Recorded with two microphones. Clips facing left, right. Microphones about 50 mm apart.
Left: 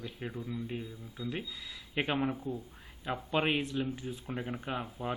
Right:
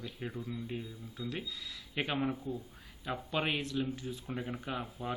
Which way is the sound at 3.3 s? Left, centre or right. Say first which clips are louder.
Left 3 dB; left.